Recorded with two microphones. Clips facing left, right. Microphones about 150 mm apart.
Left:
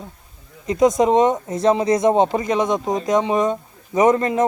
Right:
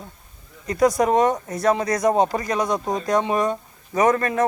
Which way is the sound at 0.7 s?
20° left (ahead or behind).